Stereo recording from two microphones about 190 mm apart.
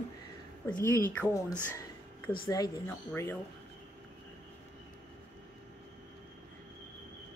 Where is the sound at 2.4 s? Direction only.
20° left (ahead or behind).